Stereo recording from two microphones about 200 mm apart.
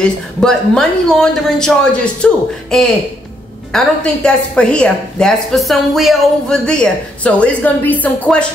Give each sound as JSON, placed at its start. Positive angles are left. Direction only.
{"t": 0.0, "sound": "a woman's voice", "side_deg": 5}